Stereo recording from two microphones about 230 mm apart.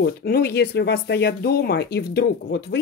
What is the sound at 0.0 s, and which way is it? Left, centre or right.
Speech, left.